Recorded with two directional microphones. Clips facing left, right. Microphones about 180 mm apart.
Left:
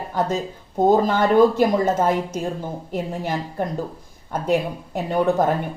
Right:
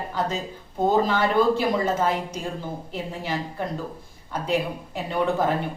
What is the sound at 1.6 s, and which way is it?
A woman's voice, 45° left (ahead or behind).